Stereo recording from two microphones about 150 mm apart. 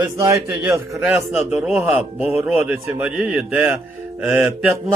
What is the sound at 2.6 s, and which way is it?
Speech, 15° right (ahead or behind).